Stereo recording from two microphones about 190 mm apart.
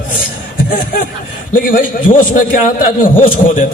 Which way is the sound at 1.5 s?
45° left (ahead or behind).